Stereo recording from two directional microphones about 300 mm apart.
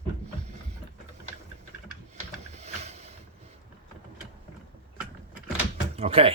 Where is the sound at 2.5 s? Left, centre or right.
Right.